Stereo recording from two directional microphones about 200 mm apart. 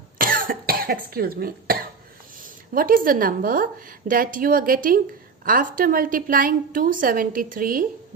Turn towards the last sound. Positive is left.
turn(degrees=-45)  # may be behind; listen again after turning